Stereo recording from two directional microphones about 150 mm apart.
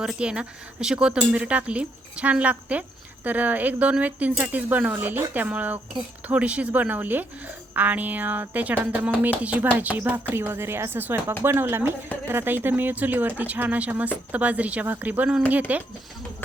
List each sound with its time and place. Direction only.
0.0 s speech: 5° right (ahead or behind)